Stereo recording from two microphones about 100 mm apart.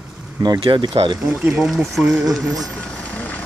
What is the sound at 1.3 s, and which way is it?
Speech, 5° right (ahead or behind).